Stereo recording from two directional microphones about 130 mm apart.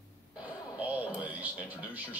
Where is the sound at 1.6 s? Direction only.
10° right (ahead or behind).